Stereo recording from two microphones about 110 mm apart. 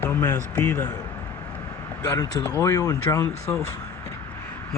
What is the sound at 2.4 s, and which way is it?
Speech, 25° left (ahead or behind).